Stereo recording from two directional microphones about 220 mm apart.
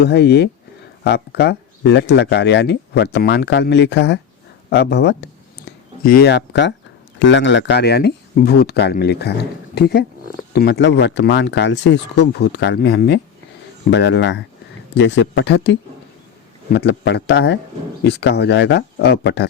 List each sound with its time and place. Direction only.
0.0 s speech: 50° left (ahead or behind)